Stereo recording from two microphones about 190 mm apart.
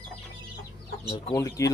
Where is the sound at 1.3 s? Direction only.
15° left (ahead or behind).